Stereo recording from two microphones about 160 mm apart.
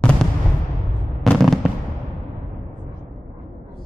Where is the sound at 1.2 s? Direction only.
Centre (ahead or behind).